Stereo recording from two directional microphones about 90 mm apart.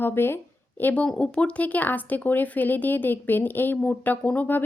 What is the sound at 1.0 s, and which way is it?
A woman's voice, 10° left (ahead or behind).